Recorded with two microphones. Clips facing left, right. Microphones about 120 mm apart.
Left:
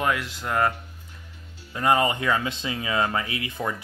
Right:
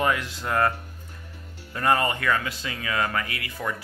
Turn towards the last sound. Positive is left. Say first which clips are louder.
# left 2 dB
turn(degrees=20)  # may be behind; listen again after turning